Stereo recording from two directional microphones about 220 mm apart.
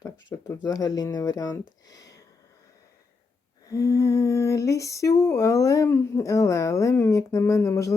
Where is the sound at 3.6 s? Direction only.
15° left (ahead or behind).